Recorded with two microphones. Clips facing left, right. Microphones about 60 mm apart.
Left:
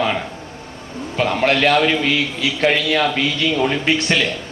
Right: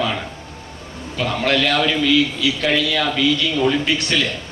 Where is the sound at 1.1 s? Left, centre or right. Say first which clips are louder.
Left 2 dB; left.